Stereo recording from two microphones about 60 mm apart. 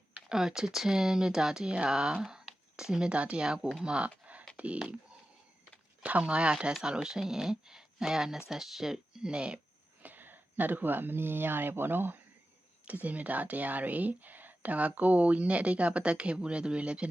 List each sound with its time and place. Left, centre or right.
0.3 s speech: centre
3.9 s a sound: right
6.0 s speech: right
10.0 s speech: right
12.8 s speech: right